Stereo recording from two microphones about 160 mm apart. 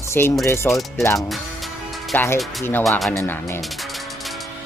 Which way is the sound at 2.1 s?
15° left (ahead or behind).